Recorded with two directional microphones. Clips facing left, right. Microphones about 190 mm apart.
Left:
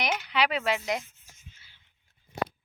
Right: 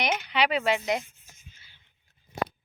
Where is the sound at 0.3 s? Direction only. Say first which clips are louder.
Right 2 dB; centre (ahead or behind).